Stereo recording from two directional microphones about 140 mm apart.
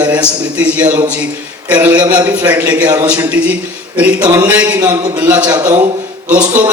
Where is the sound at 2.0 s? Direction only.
10° right (ahead or behind).